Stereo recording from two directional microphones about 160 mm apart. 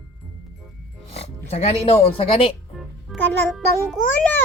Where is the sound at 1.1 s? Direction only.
40° left (ahead or behind).